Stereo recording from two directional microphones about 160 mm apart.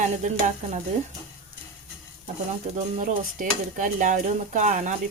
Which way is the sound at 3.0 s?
55° right (ahead or behind).